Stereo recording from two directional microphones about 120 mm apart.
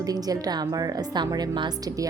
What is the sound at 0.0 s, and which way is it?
A woman's voice, 30° right (ahead or behind).